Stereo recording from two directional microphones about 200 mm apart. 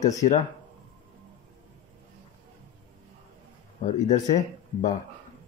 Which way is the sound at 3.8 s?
35° left (ahead or behind).